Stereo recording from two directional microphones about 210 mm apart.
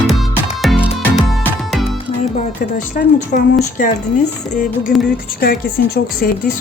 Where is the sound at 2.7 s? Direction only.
40° left (ahead or behind).